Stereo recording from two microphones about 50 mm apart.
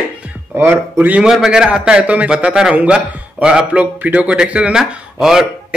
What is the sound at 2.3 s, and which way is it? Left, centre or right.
Speech, centre.